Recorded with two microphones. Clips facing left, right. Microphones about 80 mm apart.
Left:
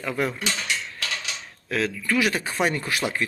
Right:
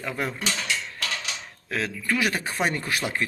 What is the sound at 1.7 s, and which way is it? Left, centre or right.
Speech, right.